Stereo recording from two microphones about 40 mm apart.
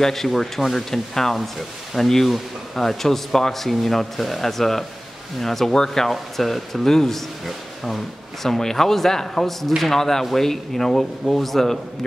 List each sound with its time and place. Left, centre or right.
0.0 s speech: centre